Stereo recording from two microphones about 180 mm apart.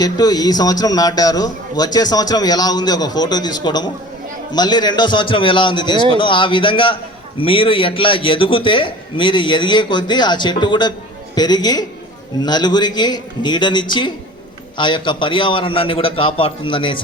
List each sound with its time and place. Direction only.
0.0 s a man's voice: 20° left (ahead or behind)